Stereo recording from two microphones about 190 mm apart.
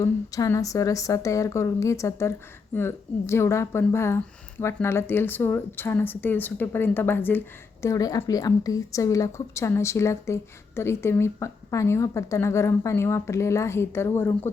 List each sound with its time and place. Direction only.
0.0 s a woman's voice: 15° left (ahead or behind)